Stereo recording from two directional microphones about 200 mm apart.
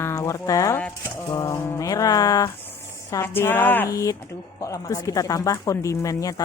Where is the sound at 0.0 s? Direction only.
15° left (ahead or behind).